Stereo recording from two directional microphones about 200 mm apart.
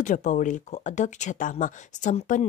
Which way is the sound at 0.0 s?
40° left (ahead or behind).